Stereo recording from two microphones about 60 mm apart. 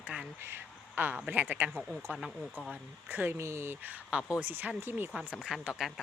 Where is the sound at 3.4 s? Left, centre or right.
Right.